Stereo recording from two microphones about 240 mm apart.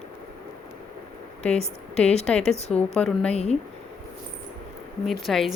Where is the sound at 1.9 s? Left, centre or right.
Centre.